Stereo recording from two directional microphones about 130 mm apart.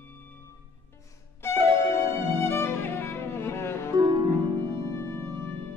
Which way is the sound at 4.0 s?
35° right (ahead or behind).